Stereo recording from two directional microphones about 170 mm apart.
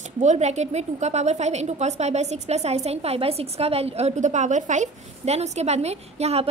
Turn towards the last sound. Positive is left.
turn(degrees=-40)  # may be behind; listen again after turning